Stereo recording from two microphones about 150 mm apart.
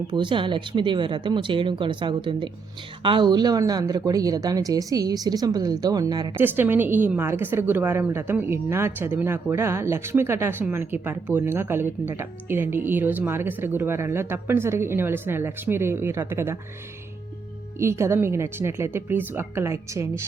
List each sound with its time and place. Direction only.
0.1 s speech: 35° right (ahead or behind)
6.3 s a woman's voice: 15° right (ahead or behind)
17.7 s a woman's voice: 20° right (ahead or behind)